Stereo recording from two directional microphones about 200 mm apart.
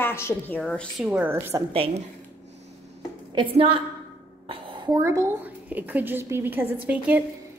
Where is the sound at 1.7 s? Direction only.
30° right (ahead or behind).